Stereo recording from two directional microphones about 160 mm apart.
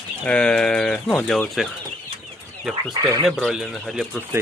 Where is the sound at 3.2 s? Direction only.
Centre (ahead or behind).